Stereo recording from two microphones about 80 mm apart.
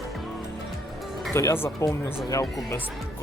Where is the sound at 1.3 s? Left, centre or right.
Left.